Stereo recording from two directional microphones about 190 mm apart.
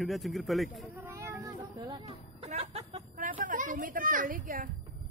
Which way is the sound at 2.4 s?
35° right (ahead or behind).